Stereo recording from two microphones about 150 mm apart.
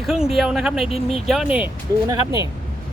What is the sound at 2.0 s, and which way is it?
Speech, 25° right (ahead or behind).